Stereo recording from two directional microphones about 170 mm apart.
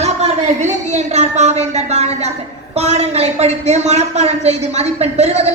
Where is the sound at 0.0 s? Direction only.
40° right (ahead or behind).